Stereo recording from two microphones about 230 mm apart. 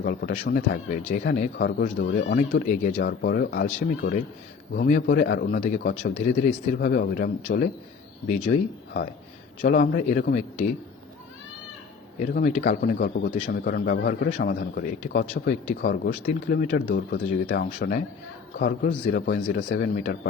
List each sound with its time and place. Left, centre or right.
0.0 s speech: left
5.0 s a man's voice: left
12.2 s a man's voice: left